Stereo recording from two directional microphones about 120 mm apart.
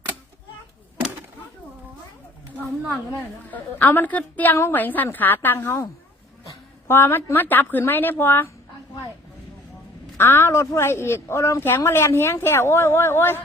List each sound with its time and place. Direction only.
3.1 s a woman's voice: 15° left (ahead or behind)
10.2 s a woman's voice: 20° left (ahead or behind)